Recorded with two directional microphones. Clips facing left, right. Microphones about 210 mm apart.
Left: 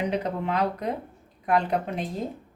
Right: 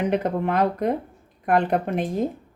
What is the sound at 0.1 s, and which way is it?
Speech, 50° right (ahead or behind).